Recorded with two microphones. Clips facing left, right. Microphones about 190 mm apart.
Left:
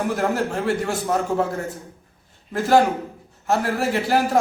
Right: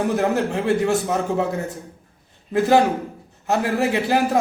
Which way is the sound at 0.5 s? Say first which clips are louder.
Right 3 dB; 20° right (ahead or behind).